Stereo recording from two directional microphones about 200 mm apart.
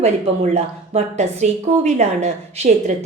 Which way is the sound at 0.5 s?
35° right (ahead or behind).